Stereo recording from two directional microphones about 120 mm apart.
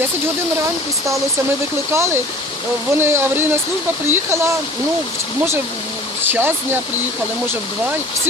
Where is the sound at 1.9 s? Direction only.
20° right (ahead or behind).